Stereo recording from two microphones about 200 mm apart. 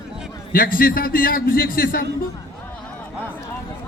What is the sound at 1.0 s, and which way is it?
A man's voice, 45° left (ahead or behind).